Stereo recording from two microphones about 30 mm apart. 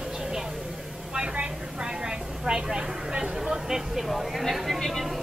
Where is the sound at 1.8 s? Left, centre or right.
Right.